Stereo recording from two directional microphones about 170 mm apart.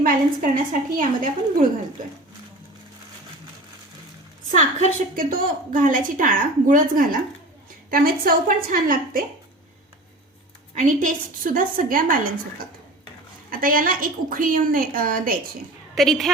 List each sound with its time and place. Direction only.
0.0 s a woman's voice: 55° right (ahead or behind)
4.5 s a woman's voice: 50° right (ahead or behind)
10.8 s a woman's voice: 50° right (ahead or behind)
16.0 s a woman's voice: centre (ahead or behind)